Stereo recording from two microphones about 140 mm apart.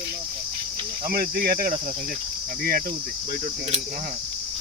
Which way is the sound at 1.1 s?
90° right.